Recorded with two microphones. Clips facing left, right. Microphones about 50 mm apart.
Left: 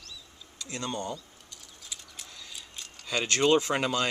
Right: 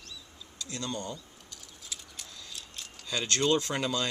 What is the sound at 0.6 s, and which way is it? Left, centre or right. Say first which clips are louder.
Speech: left 2 dB; left.